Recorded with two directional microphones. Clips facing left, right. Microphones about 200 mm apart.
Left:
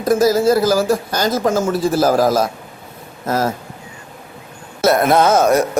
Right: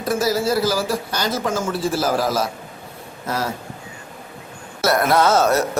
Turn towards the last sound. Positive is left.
turn(degrees=15)  # may be behind; listen again after turning